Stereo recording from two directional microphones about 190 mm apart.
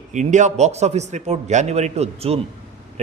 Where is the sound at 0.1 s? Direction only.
40° right (ahead or behind).